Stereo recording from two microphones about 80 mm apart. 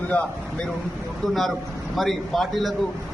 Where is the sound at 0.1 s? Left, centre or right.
Centre.